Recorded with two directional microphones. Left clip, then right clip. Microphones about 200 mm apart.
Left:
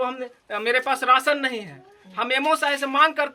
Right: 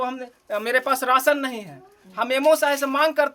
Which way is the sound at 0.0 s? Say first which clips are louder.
Left 1 dB; 20° right (ahead or behind).